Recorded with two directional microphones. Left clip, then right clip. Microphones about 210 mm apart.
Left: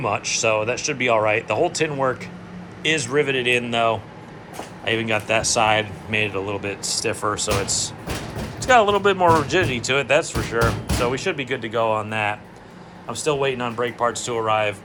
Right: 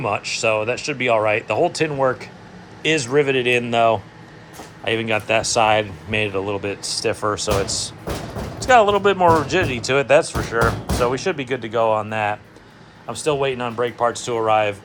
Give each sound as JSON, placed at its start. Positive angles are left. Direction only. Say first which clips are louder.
{"t": 0.0, "sound": "speech", "louder": "right 1 dB", "side_deg": -20}
{"t": 2.8, "sound": "speech", "louder": "right 2 dB", "side_deg": -25}
{"t": 10.3, "sound": "speech", "louder": "right 2 dB", "side_deg": -5}